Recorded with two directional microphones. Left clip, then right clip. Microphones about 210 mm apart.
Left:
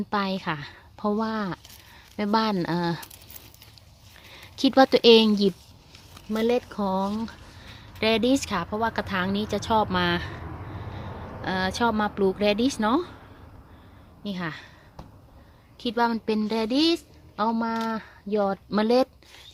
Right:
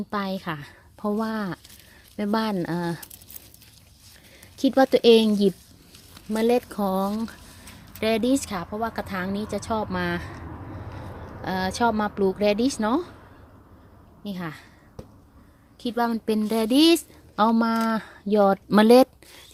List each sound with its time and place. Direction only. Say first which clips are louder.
0.1 s speech: left 2 dB; centre (ahead or behind)
4.4 s speech: left 1 dB; centre (ahead or behind)
6.3 s speech: right 2 dB; 25° right (ahead or behind)
7.9 s speech: left 1 dB; centre (ahead or behind)
11.4 s speech: right 1 dB; 5° right (ahead or behind)
14.3 s speech: left 2 dB; centre (ahead or behind)
15.8 s speech: left 1 dB; 5° right (ahead or behind); by 17.0 s 25° right (ahead or behind)
17.3 s speech: right 4 dB; 45° right (ahead or behind)